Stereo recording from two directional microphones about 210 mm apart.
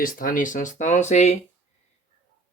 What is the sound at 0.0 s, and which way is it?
Speech, 40° left (ahead or behind).